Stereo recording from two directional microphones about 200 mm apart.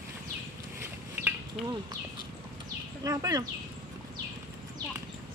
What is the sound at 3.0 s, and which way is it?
Speech, 15° right (ahead or behind).